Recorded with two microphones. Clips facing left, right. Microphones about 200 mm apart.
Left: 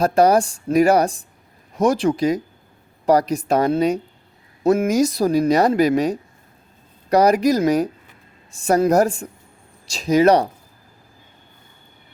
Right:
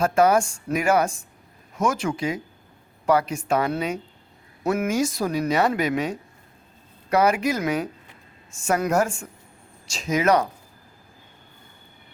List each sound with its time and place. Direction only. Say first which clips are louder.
0.0 s speech: left 4 dB; 35° left (ahead or behind)